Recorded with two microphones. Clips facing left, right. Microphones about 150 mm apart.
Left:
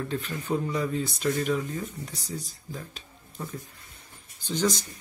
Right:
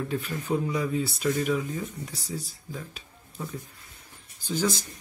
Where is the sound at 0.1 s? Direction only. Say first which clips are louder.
Right 1 dB; 5° right (ahead or behind).